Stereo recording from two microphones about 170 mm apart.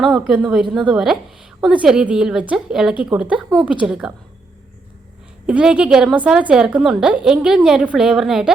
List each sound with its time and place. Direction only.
0.0 s a woman's voice: centre (ahead or behind)
5.5 s a woman's voice: 5° right (ahead or behind)